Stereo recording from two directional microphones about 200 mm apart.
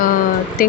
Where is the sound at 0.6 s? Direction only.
45° left (ahead or behind).